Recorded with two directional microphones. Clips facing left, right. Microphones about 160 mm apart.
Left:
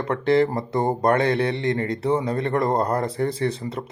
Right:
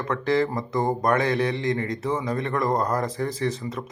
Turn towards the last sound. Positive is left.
turn(degrees=30)  # may be behind; listen again after turning